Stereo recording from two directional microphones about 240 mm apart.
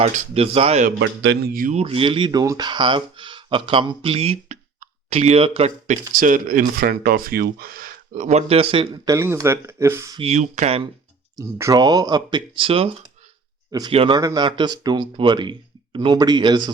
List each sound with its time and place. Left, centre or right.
0.0 s a man's voice: right
0.9 s a man's voice: right; by 10.2 s centre
10.2 s a man's voice: right
11.3 s a man's voice: centre